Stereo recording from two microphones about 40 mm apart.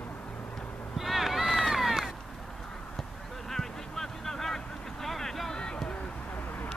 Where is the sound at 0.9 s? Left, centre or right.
Centre.